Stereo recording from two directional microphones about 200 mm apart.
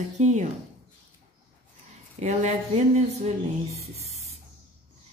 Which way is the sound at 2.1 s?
35° right (ahead or behind).